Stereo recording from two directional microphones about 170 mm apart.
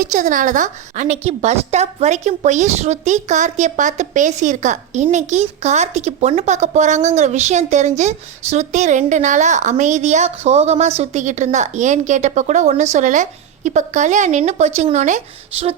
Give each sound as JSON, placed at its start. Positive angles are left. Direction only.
{"t": 0.0, "sound": "a woman's voice", "side_deg": -50}